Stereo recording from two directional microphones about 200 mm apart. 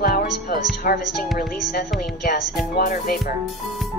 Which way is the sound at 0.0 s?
45° left (ahead or behind).